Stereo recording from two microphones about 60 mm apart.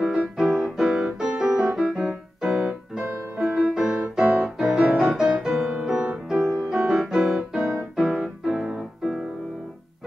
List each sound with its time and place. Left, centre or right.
0.0 s music: centre
0.4 s music: centre
1.8 s piano: centre
2.5 s keyboard: centre
3.0 s music: right
3.7 s music: centre
4.9 s music: centre
5.2 s music: centre
6.7 s keyboard: centre
7.9 s piano: centre
8.2 s keyboard: centre